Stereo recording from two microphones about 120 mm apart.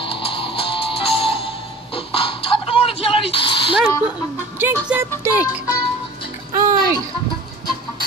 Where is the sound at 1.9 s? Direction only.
50° left (ahead or behind).